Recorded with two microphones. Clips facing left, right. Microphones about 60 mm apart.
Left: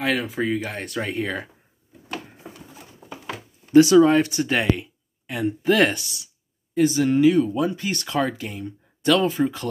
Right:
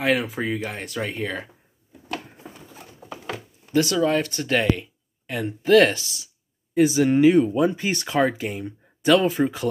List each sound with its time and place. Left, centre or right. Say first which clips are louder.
0.0 s speech: right 1 dB; centre
3.7 s speech: left 7 dB; left; by 6.3 s centre
6.7 s speech: right 1 dB; centre
7.1 s speech: right 1 dB; right; by 9.7 s centre